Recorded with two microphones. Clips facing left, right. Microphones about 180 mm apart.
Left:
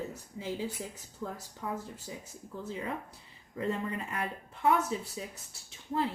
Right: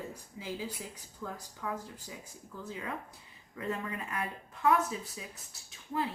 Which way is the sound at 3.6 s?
30° left (ahead or behind).